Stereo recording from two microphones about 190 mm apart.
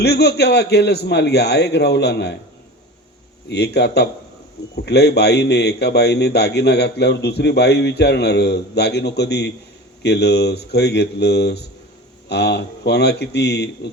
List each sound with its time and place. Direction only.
0.0 s a man's voice: 60° left (ahead or behind)
3.5 s a man's voice: 60° left (ahead or behind)